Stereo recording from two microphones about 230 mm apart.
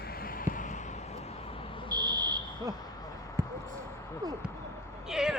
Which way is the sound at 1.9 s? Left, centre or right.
Centre.